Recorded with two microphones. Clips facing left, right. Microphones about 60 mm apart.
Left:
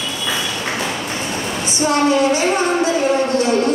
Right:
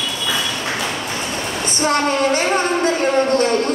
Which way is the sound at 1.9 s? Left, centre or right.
Right.